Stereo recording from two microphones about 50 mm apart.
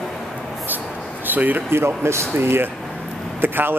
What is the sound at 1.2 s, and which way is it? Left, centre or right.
Speech, right.